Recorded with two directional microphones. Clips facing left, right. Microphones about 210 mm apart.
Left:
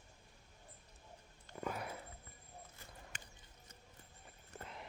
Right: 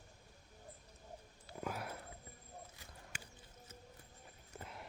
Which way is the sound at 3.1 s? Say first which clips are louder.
Right 2 dB; 10° right (ahead or behind).